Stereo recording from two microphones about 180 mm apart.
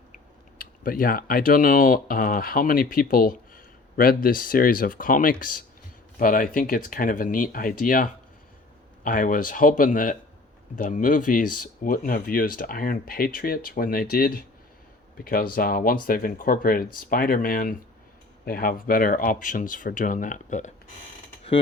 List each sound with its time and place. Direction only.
0.6 s speech: 50° left (ahead or behind)